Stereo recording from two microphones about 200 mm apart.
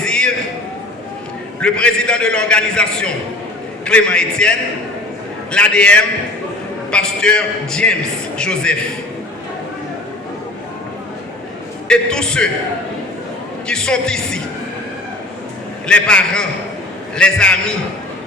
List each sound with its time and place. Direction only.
0.0 s a sound: 5° left (ahead or behind)
1.6 s a man's voice: 5° left (ahead or behind)
11.9 s a man's voice: 5° left (ahead or behind)
13.7 s a man's voice: 5° left (ahead or behind)
15.9 s a man's voice: 5° left (ahead or behind)